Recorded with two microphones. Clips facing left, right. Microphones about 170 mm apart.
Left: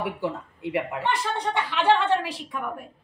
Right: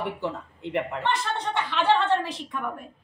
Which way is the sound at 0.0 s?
5° left (ahead or behind).